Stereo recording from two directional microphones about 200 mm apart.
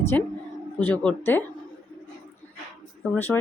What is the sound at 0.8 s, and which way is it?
Speech, 10° left (ahead or behind).